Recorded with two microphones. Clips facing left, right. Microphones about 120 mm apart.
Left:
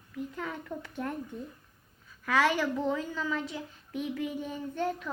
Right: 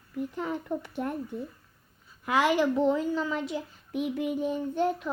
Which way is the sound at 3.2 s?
20° right (ahead or behind).